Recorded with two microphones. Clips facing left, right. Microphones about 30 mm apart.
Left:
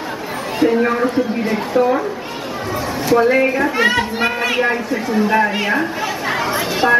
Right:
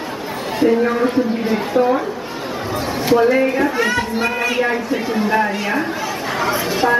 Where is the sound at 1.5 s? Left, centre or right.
Centre.